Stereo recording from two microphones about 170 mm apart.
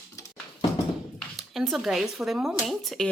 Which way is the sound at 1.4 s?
Centre (ahead or behind).